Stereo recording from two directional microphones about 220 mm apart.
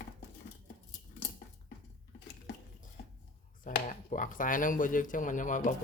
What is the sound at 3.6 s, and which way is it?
Speech, 35° left (ahead or behind).